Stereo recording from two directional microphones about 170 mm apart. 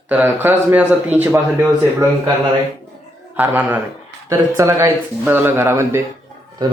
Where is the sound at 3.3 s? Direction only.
10° right (ahead or behind).